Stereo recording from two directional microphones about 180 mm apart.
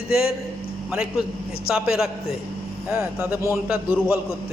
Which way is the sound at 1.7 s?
5° right (ahead or behind).